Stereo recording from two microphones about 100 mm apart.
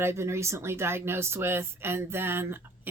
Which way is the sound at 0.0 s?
25° right (ahead or behind).